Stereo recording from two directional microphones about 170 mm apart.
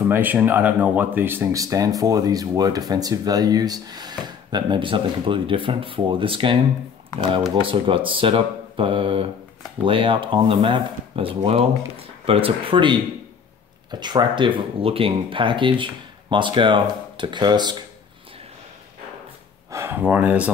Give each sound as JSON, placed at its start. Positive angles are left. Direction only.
{"t": 0.0, "sound": "speech", "side_deg": -10}
{"t": 7.6, "sound": "speech", "side_deg": -30}
{"t": 19.7, "sound": "speech", "side_deg": -15}